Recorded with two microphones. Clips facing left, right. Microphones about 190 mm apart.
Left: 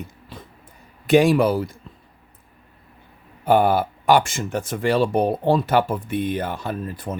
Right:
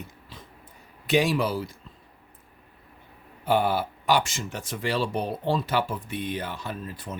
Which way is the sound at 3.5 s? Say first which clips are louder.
Left 6 dB; 50° left (ahead or behind).